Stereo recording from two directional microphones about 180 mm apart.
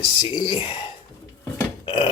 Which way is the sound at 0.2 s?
30° left (ahead or behind).